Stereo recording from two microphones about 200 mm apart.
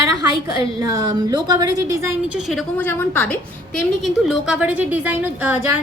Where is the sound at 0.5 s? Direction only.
20° right (ahead or behind).